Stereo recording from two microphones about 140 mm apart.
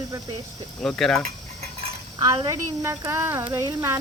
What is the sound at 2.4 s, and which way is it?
Speech, 20° right (ahead or behind).